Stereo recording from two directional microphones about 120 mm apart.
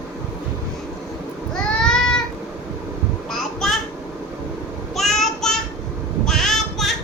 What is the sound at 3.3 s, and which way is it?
Child singing, 5° left (ahead or behind).